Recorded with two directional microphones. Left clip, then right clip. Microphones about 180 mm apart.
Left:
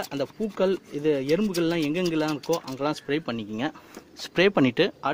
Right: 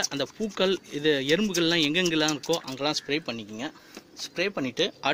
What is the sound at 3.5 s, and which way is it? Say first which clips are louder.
Speech: left 5 dB; 50° left (ahead or behind).